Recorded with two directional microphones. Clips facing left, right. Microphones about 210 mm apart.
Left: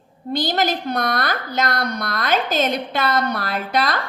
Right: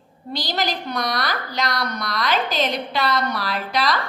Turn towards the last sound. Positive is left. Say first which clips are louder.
# left 1 dB
turn(degrees=50)  # may be behind; listen again after turning